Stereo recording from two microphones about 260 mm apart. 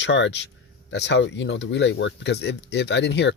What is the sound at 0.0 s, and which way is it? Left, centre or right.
Speech, left.